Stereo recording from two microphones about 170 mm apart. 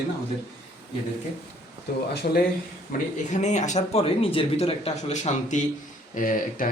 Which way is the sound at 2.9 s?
55° left (ahead or behind).